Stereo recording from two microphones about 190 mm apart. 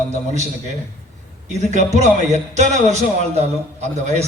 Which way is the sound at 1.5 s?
40° right (ahead or behind).